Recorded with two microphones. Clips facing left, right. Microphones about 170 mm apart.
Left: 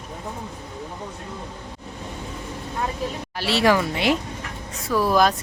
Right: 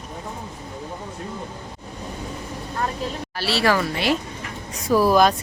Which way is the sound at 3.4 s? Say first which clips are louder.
Left 2 dB; 20° left (ahead or behind).